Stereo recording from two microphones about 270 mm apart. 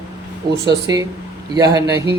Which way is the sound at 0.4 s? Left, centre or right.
Centre.